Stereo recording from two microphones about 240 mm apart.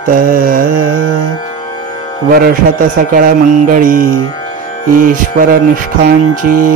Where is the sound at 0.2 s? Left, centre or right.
Right.